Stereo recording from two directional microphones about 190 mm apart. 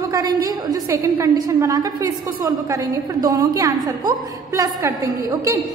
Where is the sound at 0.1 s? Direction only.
20° right (ahead or behind).